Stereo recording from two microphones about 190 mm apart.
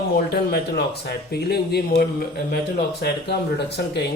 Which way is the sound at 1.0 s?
55° left (ahead or behind).